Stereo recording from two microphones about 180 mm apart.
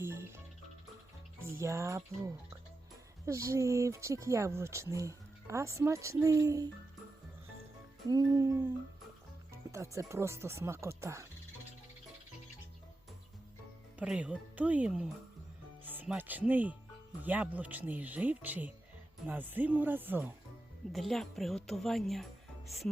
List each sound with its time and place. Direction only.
0.0 s music: 15° right (ahead or behind)
1.5 s speech: 15° right (ahead or behind)
8.0 s music: 20° right (ahead or behind)
9.5 s speech: 15° right (ahead or behind)
14.0 s speech: 5° right (ahead or behind)
20.9 s speech: centre (ahead or behind)